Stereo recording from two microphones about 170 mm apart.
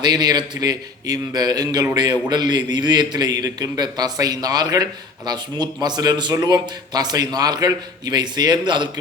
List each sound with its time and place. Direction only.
0.0 s a man's voice: 25° right (ahead or behind)